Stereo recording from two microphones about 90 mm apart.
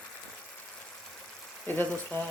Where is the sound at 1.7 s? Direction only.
20° left (ahead or behind).